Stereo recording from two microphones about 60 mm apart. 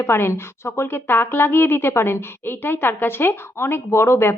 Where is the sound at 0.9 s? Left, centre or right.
Left.